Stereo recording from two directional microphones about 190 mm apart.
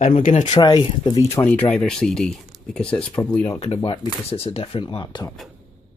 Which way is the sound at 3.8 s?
25° left (ahead or behind).